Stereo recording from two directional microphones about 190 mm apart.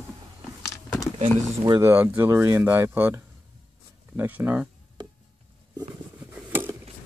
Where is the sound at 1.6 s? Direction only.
15° right (ahead or behind).